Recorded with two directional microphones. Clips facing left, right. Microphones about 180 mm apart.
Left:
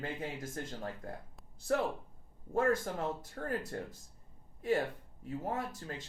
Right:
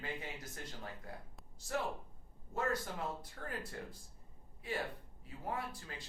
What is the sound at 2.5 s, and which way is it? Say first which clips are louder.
Speech: left 7 dB; 50° left (ahead or behind).